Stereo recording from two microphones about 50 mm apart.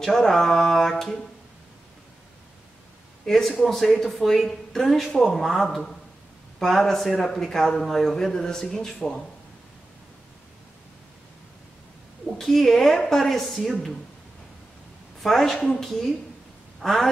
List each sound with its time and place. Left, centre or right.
0.0 s a woman's voice: centre
3.3 s a woman's voice: centre
12.3 s a woman's voice: centre
15.2 s a woman's voice: centre
15.9 s a woman's voice: centre